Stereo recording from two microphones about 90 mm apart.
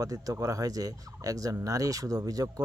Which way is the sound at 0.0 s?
40° right (ahead or behind).